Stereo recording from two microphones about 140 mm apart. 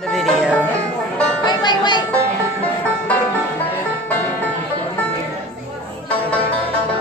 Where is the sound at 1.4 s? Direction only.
30° left (ahead or behind).